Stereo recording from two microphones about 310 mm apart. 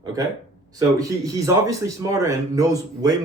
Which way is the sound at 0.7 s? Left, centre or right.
Centre.